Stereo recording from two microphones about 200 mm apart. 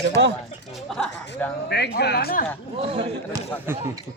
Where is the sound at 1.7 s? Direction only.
55° left (ahead or behind).